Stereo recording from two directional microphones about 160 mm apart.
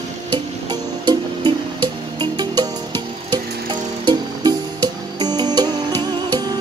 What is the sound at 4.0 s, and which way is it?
Music, 25° right (ahead or behind).